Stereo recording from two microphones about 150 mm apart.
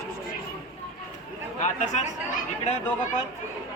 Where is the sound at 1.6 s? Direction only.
50° left (ahead or behind).